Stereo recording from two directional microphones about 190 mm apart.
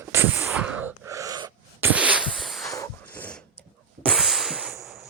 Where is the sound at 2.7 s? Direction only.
15° left (ahead or behind).